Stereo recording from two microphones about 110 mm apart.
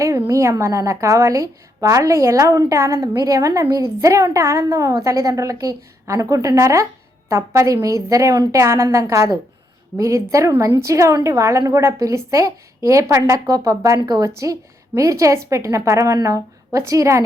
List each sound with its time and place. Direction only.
0.3 s a woman's voice: 25° right (ahead or behind)